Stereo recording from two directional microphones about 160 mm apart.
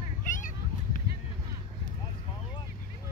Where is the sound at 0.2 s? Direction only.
55° left (ahead or behind).